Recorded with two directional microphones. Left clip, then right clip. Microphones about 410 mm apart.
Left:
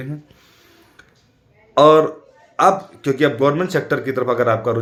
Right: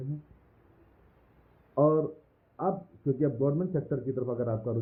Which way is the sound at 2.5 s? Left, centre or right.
Centre.